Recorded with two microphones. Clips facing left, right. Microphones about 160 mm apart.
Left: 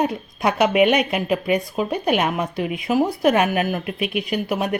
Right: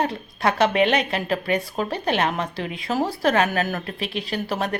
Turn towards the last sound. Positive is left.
turn(degrees=15)  # may be behind; listen again after turning